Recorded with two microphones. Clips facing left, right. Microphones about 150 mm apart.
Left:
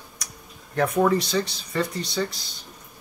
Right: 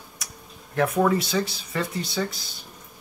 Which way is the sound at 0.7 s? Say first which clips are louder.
Left 1 dB; centre (ahead or behind).